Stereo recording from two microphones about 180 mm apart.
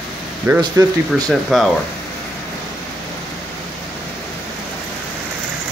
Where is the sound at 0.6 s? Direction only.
20° right (ahead or behind).